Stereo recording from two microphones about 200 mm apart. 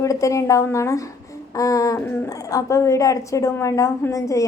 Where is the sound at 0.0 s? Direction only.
15° left (ahead or behind).